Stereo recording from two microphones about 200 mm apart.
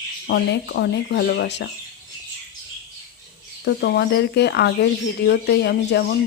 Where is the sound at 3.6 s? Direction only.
55° left (ahead or behind).